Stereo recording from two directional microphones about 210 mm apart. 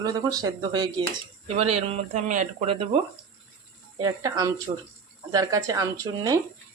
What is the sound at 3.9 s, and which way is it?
Speech, 15° right (ahead or behind).